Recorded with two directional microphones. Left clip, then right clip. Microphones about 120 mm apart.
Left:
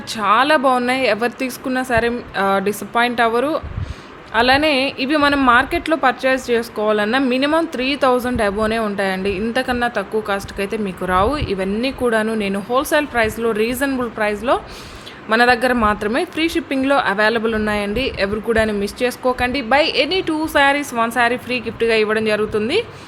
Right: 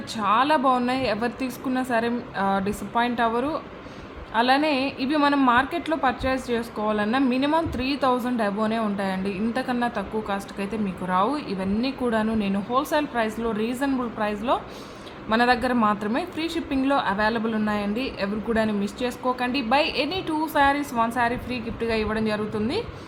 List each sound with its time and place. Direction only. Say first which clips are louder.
0.1 s a woman's voice: left 6 dB; 35° left (ahead or behind)